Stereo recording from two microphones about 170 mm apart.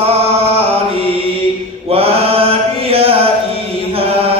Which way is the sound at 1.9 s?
35° right (ahead or behind).